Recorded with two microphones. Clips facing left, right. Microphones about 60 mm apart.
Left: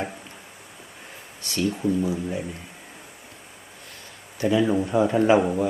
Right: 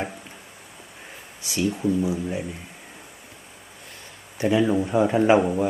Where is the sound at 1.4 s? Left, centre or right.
Centre.